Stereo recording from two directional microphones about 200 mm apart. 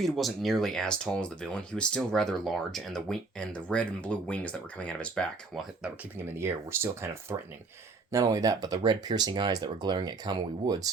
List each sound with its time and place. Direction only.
0.0 s speech: centre (ahead or behind)
6.2 s speech: 10° right (ahead or behind)